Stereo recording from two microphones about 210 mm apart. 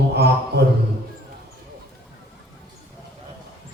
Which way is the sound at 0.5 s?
55° right (ahead or behind).